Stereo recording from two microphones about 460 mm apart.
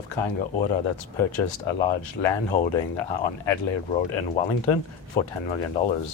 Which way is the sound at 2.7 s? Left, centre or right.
Left.